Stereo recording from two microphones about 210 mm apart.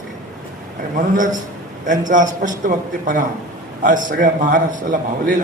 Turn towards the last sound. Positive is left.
turn(degrees=-40)  # may be behind; listen again after turning